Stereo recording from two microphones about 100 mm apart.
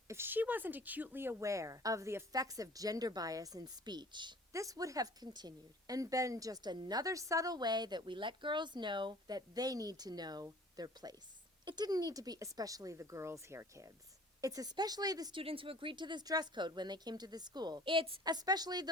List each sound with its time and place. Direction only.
0.1 s a woman's voice: 20° right (ahead or behind); by 4.4 s 50° right (ahead or behind)
4.5 s a woman's voice: 35° right (ahead or behind)
15.3 s speech: 65° right (ahead or behind); by 18.9 s 40° right (ahead or behind)